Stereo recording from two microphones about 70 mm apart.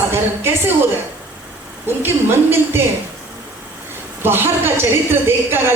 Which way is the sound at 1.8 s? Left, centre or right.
Right.